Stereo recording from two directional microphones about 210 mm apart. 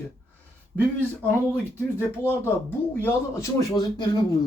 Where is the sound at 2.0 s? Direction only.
10° left (ahead or behind).